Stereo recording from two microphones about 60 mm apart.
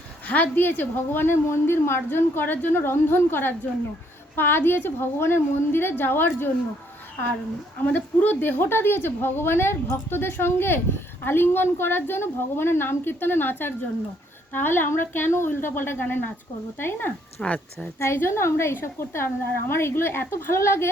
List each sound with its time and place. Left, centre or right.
0.3 s a woman's voice: left
7.9 s a woman's voice: left
17.4 s speech: left
18.0 s a woman's voice: left